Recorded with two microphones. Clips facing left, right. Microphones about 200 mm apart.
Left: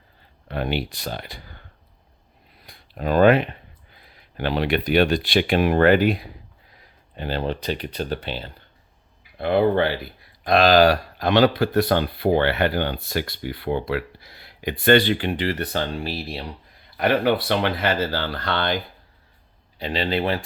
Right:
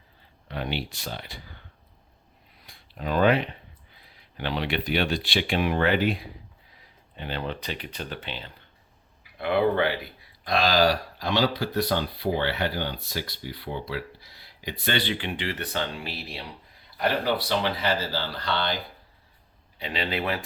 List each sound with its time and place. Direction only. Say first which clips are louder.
0.4 s a sound: left 6 dB; 50° left (ahead or behind)
0.9 s speech: left 5 dB; 45° left (ahead or behind)
2.9 s speech: left 6 dB; 50° left (ahead or behind)
3.9 s a sound: left 7 dB; 50° left (ahead or behind)
4.9 s speech: left 9 dB; 45° left (ahead or behind)
7.2 s speech: left 6 dB; 35° left (ahead or behind)
10.4 s speech: left 7 dB; 55° left (ahead or behind); by 16.4 s 35° left (ahead or behind)
17.0 s speech: left 6 dB; 60° left (ahead or behind)
19.8 s speech: left 6 dB; 35° left (ahead or behind)